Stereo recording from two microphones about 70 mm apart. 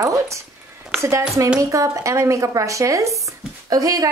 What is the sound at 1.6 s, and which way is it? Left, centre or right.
A woman's voice, right.